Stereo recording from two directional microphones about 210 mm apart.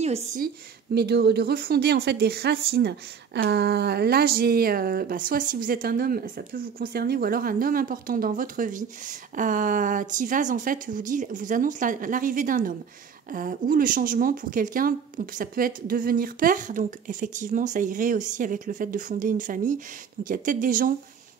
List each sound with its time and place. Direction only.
0.9 s speech: 50° right (ahead or behind)